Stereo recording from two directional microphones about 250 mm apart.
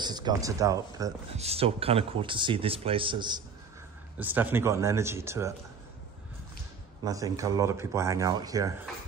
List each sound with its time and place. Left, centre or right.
0.0 s speech: centre
1.3 s speech: right
4.2 s speech: centre
7.1 s speech: centre